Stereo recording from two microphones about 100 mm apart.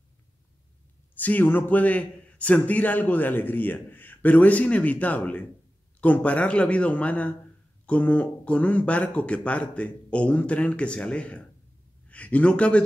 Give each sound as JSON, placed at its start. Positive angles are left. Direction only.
{"t": 1.1, "sound": "speech", "side_deg": 15}